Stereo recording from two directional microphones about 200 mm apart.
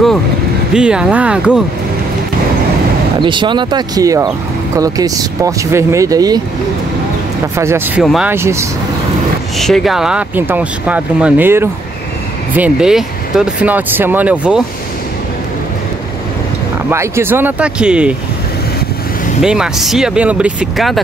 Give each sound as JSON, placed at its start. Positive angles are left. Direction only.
{"t": 0.7, "sound": "speech", "side_deg": -5}
{"t": 3.2, "sound": "speech", "side_deg": -25}
{"t": 7.5, "sound": "speech", "side_deg": -15}
{"t": 8.0, "sound": "speech", "side_deg": 0}
{"t": 8.3, "sound": "speech", "side_deg": -15}
{"t": 9.6, "sound": "speech", "side_deg": 0}
{"t": 16.9, "sound": "speech", "side_deg": -15}
{"t": 19.4, "sound": "speech", "side_deg": -5}